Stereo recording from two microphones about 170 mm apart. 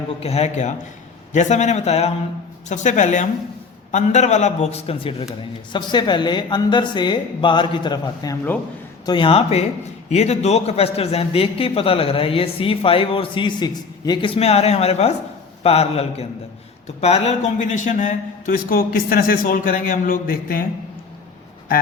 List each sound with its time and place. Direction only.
0.2 s a man's voice: 40° left (ahead or behind); by 20.7 s 55° left (ahead or behind)